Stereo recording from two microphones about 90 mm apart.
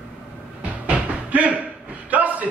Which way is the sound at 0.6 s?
15° right (ahead or behind).